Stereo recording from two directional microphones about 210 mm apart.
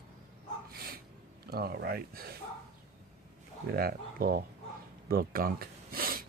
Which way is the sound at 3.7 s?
45° right (ahead or behind).